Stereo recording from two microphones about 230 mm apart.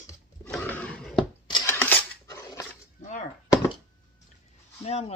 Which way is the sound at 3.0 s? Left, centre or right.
Left.